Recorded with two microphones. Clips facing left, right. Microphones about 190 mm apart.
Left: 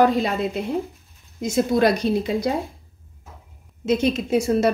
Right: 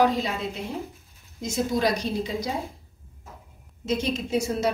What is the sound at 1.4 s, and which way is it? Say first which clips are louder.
A woman's voice: left 6 dB; 60° left (ahead or behind).